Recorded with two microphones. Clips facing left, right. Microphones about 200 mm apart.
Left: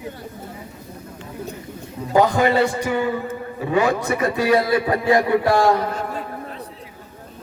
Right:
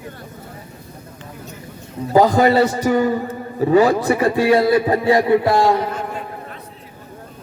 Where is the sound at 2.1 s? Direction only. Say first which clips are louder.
Right 3 dB; 35° right (ahead or behind).